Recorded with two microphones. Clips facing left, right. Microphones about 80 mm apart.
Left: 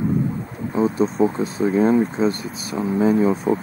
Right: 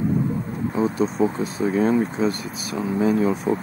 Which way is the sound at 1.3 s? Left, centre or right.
Left.